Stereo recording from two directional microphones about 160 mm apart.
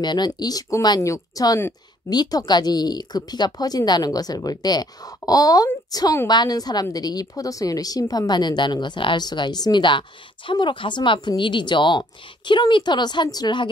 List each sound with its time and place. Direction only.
0.0 s speech: 25° left (ahead or behind)